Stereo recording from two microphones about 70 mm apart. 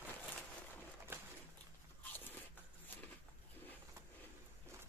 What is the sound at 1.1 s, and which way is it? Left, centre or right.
Pigeon, right.